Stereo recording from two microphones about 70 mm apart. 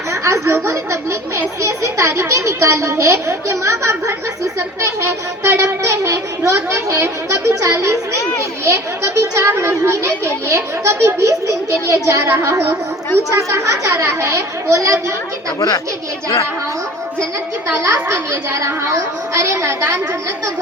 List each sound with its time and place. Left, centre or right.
0.1 s a child's voice: right
17.7 s a child's voice: right